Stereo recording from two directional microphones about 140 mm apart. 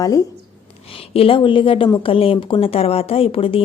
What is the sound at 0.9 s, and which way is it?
A woman's voice, 40° left (ahead or behind).